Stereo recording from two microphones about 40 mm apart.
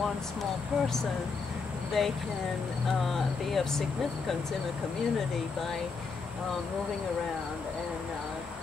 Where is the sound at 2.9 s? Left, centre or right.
Centre.